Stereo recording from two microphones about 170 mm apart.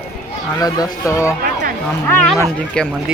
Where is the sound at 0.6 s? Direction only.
20° left (ahead or behind).